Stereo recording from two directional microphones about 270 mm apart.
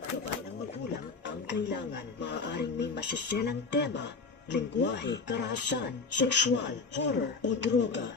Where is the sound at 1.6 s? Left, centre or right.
Left.